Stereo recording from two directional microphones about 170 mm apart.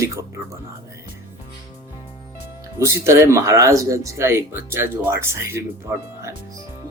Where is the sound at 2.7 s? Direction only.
15° right (ahead or behind).